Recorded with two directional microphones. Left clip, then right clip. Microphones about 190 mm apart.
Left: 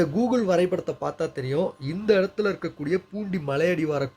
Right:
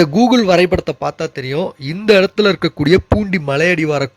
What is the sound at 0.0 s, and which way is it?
Speech, 35° right (ahead or behind).